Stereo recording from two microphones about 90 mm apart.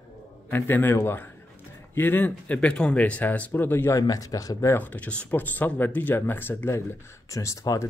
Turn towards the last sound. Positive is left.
turn(degrees=35)  # may be behind; listen again after turning